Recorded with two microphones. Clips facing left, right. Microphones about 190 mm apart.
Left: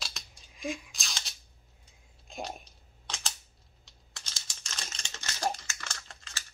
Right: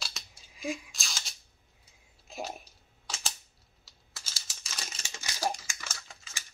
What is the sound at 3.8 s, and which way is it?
Crumpling, 5° right (ahead or behind).